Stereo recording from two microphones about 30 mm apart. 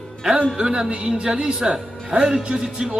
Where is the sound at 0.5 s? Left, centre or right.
Right.